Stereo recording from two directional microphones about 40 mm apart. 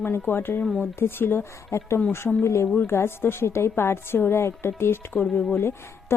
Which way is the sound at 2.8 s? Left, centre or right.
Left.